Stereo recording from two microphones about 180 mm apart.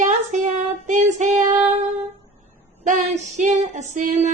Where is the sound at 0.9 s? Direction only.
40° right (ahead or behind).